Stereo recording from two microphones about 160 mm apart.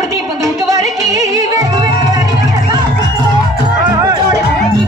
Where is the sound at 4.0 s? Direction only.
25° right (ahead or behind).